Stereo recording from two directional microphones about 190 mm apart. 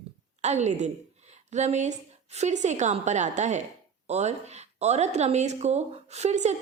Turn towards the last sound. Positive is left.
turn(degrees=-35)  # may be behind; listen again after turning